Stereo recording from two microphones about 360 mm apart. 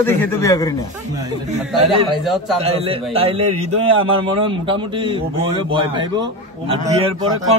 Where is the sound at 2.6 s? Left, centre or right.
Centre.